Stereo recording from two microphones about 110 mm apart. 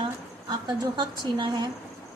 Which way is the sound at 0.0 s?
40° right (ahead or behind).